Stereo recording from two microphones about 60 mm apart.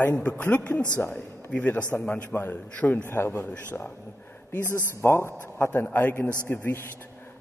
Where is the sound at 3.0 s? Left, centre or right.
Left.